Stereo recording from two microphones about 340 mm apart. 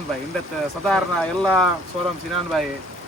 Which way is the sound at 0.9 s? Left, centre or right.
Centre.